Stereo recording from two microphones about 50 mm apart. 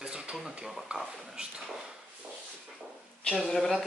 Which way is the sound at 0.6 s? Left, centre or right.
Centre.